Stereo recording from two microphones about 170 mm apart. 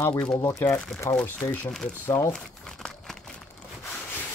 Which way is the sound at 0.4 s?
20° left (ahead or behind).